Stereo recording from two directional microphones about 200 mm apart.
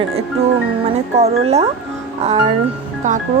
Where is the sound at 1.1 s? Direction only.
30° right (ahead or behind).